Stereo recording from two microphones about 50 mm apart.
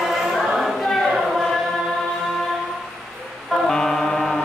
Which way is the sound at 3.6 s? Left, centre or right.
Centre.